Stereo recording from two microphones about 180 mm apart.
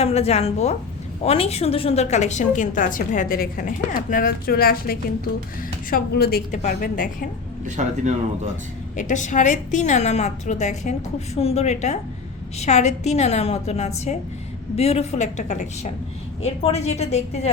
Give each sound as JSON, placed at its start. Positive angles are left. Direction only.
{"t": 0.0, "sound": "a woman's voice", "side_deg": 35}
{"t": 9.0, "sound": "a woman's voice", "side_deg": 45}